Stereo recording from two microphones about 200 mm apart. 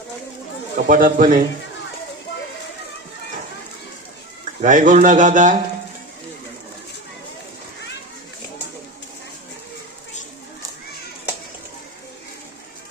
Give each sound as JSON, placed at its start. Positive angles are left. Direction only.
{"t": 0.8, "sound": "speech", "side_deg": -40}
{"t": 4.6, "sound": "speech", "side_deg": -40}